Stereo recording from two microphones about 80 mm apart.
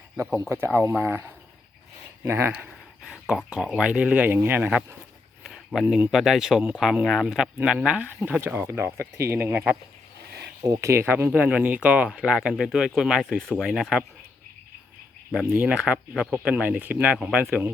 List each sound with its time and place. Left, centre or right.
0.3 s speech: right
2.5 s a sound: centre
3.6 s speech: centre; by 4.9 s right
5.4 s speech: centre
8.4 s speech: right
11.3 s speech: centre
15.5 s speech: centre